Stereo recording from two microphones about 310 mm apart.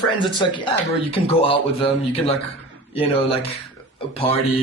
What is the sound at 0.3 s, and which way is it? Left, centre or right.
A man's voice, centre.